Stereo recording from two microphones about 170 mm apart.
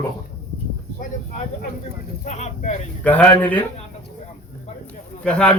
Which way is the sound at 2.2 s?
40° left (ahead or behind).